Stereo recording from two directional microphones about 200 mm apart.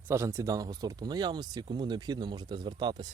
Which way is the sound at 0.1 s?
15° right (ahead or behind).